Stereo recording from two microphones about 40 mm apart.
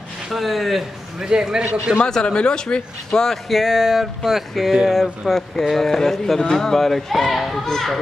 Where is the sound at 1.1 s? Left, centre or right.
Centre.